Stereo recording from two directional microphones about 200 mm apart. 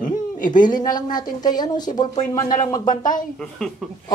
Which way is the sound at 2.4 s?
40° left (ahead or behind).